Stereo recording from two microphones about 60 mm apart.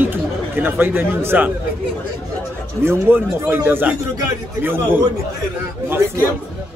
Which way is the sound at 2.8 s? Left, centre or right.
Right.